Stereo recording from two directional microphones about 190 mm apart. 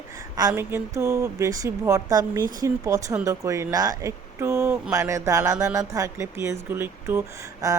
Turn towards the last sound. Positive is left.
turn(degrees=-15)  # may be behind; listen again after turning